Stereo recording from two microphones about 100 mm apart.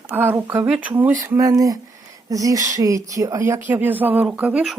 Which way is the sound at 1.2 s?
35° right (ahead or behind).